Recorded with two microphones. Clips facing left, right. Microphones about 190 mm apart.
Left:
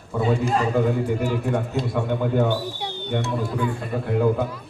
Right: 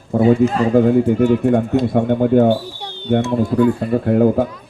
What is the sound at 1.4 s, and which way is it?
Speech, 55° right (ahead or behind).